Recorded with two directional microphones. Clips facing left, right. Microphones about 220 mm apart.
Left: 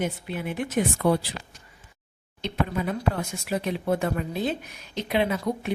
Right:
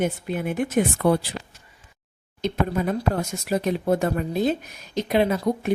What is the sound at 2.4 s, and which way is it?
A woman's voice, 45° right (ahead or behind).